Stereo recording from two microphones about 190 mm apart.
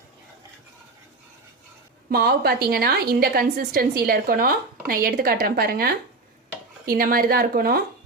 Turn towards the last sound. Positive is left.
turn(degrees=-50)  # may be behind; listen again after turning